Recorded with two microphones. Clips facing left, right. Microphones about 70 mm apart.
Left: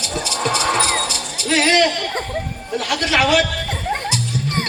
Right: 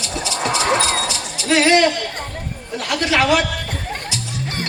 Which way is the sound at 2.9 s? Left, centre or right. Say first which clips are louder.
Even; right.